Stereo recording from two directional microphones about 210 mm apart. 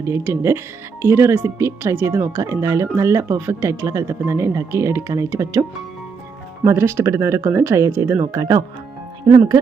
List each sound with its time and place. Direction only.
0.0 s speech: 10° right (ahead or behind)
6.7 s speech: 10° right (ahead or behind)